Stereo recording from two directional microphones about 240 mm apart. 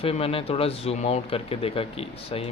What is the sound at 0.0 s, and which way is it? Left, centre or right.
Speech, left.